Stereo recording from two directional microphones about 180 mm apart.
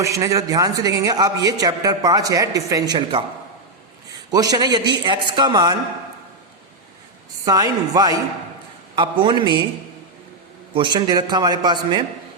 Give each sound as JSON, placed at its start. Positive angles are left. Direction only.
{"t": 0.0, "sound": "a man's voice", "side_deg": -20}
{"t": 4.3, "sound": "a man's voice", "side_deg": -20}
{"t": 7.4, "sound": "a man's voice", "side_deg": -20}
{"t": 10.8, "sound": "a man's voice", "side_deg": -25}